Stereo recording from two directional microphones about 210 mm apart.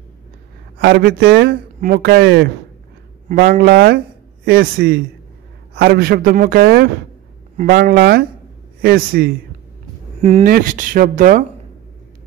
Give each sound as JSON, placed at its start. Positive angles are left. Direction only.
{"t": 0.7, "sound": "speech", "side_deg": -50}
{"t": 10.4, "sound": "speech", "side_deg": -40}